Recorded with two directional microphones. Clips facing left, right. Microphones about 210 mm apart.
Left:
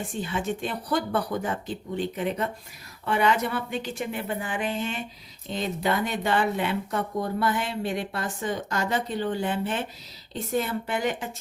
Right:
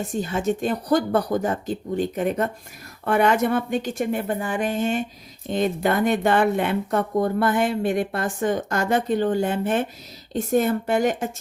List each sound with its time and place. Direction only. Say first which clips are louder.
0.1 s speech: right 7 dB; 45° right (ahead or behind)